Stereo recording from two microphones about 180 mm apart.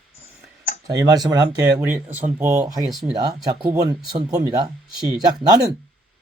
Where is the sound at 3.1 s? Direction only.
20° right (ahead or behind).